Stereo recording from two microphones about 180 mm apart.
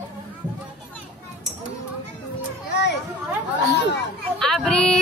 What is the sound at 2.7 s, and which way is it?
Children playing, 70° left (ahead or behind).